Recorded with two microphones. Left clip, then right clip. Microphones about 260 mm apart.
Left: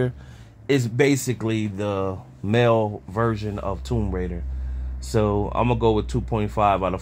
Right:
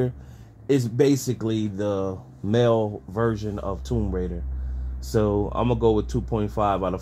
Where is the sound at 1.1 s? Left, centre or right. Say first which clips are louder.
Even; left.